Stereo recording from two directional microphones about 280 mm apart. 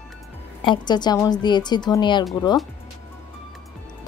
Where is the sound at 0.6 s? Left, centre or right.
Centre.